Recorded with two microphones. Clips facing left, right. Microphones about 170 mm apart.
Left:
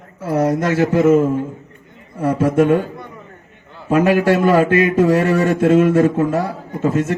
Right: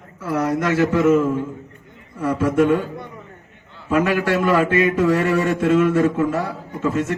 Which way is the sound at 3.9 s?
35° left (ahead or behind).